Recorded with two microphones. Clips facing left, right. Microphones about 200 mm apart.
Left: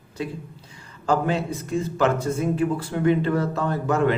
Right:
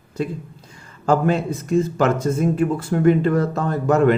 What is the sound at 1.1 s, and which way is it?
Speech, 45° right (ahead or behind).